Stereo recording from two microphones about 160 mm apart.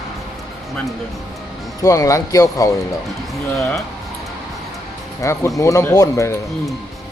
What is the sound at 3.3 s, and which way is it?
Speech, centre (ahead or behind).